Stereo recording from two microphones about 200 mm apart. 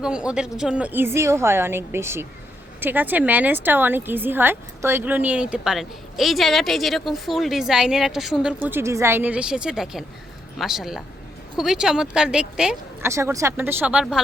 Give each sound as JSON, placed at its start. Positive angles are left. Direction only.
{"t": 0.0, "sound": "a woman's voice", "side_deg": -5}